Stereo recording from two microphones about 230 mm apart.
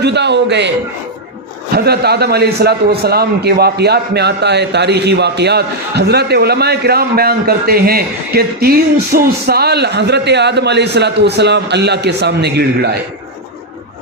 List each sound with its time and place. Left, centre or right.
0.0 s a man's voice: right
1.7 s a man's voice: right